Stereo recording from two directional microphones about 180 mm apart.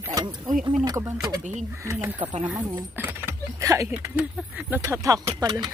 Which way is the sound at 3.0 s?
15° right (ahead or behind).